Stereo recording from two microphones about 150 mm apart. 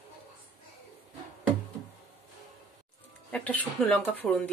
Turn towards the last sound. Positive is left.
turn(degrees=5)  # may be behind; listen again after turning